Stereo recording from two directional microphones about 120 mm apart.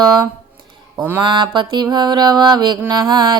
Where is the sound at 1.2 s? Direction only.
40° right (ahead or behind).